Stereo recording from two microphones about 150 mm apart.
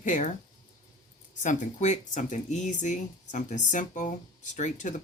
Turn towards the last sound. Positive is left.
turn(degrees=55)  # may be behind; listen again after turning